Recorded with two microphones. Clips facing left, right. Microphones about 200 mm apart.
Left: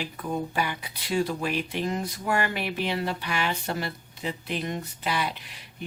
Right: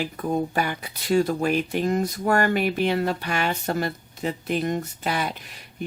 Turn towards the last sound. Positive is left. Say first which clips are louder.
# right 6 dB
turn(degrees=-45)  # may be behind; listen again after turning